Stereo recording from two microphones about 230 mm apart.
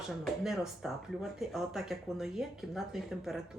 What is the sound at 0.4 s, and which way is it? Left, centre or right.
Speech, centre.